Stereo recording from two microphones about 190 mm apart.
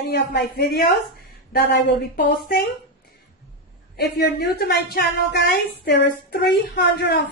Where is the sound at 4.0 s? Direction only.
60° left (ahead or behind).